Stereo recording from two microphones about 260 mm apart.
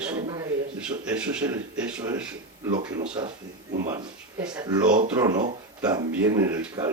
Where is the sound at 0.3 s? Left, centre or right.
Centre.